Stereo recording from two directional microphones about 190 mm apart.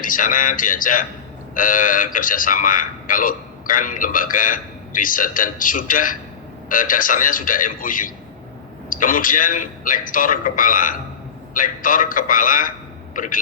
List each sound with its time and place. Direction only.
0.0 s a man's voice: 45° left (ahead or behind)